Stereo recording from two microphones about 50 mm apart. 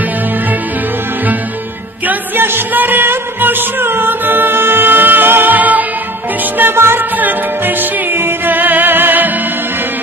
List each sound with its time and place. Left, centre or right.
2.0 s music: right
6.6 s music: right
7.2 s music: right